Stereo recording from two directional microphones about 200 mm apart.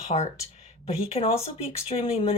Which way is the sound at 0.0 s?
30° left (ahead or behind).